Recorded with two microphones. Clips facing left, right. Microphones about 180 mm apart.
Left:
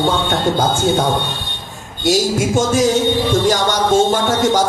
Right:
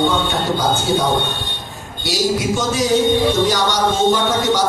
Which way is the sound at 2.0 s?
45° left (ahead or behind).